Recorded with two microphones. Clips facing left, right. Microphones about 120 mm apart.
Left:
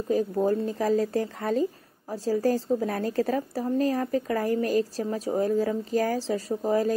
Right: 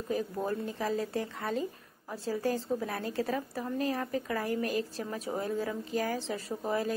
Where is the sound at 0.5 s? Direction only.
40° left (ahead or behind).